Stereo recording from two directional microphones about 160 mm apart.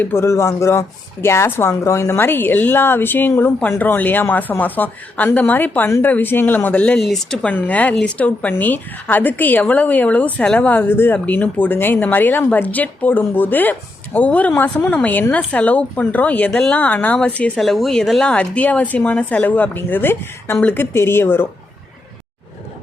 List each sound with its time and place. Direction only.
0.0 s a woman's voice: 15° left (ahead or behind)